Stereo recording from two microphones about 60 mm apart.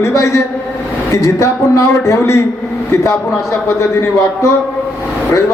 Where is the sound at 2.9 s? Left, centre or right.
Left.